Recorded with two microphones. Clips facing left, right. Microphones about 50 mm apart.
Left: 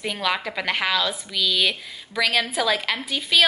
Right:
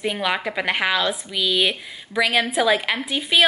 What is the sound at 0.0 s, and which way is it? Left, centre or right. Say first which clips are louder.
A woman's voice: right 2 dB; centre.